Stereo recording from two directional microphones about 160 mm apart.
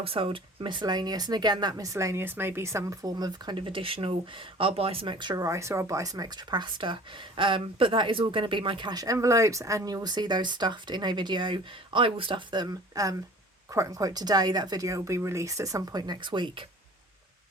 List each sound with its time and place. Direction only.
0.0 s speech: 35° right (ahead or behind)